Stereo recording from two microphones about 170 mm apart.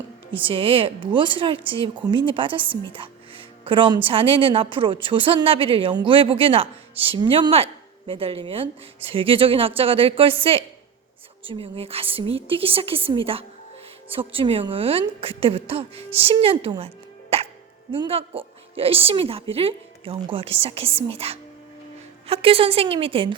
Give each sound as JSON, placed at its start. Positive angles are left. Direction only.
{"t": 0.3, "sound": "speech", "side_deg": -30}
{"t": 16.6, "sound": "music", "side_deg": -35}
{"t": 17.9, "sound": "speech", "side_deg": -35}